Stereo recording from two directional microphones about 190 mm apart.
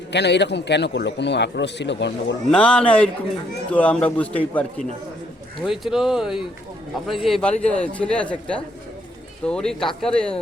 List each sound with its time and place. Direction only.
0.1 s a man's voice: 65° left (ahead or behind)
2.5 s a man's voice: 5° left (ahead or behind)